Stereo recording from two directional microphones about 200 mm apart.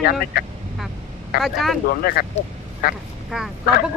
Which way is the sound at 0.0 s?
50° left (ahead or behind).